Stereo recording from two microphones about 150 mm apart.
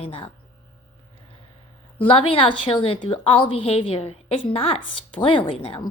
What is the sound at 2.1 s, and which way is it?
A woman's voice, 35° left (ahead or behind).